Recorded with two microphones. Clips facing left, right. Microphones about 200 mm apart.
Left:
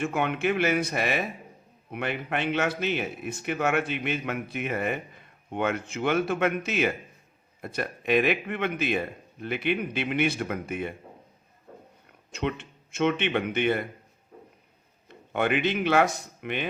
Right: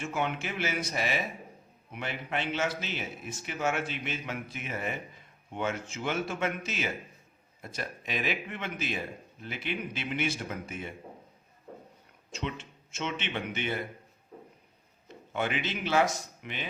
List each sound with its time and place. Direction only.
0.0 s speech: 60° left (ahead or behind)
12.3 s speech: 60° left (ahead or behind)
15.0 s speech: 60° left (ahead or behind)